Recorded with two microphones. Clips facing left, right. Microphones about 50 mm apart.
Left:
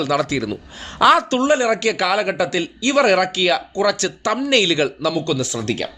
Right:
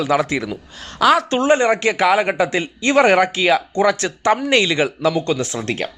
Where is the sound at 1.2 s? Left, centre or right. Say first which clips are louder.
Right 1 dB; right.